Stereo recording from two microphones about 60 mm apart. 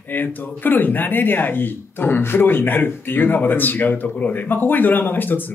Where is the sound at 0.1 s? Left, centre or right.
Left.